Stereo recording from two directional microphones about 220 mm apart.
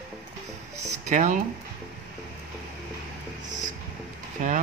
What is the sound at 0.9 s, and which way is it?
Speech, 35° right (ahead or behind).